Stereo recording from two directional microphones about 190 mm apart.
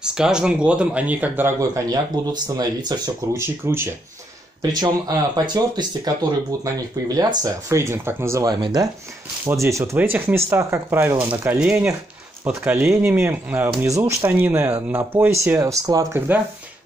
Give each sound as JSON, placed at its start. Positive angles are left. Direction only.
{"t": 0.0, "sound": "speech", "side_deg": -5}